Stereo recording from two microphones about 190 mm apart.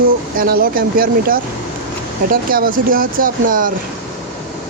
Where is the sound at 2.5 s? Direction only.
45° right (ahead or behind).